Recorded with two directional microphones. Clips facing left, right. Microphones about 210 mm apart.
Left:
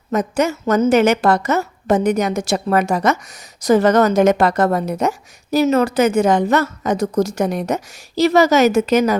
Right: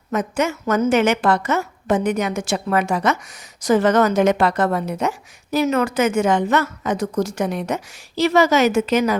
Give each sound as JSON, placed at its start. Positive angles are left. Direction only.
{"t": 0.1, "sound": "a woman's voice", "side_deg": 35}